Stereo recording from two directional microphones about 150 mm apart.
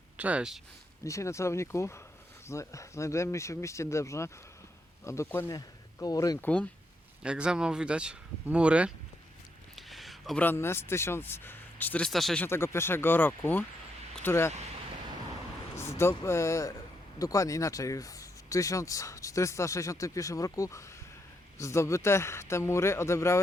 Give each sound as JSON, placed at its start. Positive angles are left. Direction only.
{"t": 0.2, "sound": "speech", "side_deg": -10}
{"t": 1.0, "sound": "speech", "side_deg": 20}
{"t": 6.4, "sound": "speech", "side_deg": 10}
{"t": 7.2, "sound": "speech", "side_deg": -5}
{"t": 9.7, "sound": "a sound", "side_deg": 0}
{"t": 10.4, "sound": "speech", "side_deg": 15}
{"t": 12.5, "sound": "speech", "side_deg": 15}
{"t": 15.7, "sound": "speech", "side_deg": 20}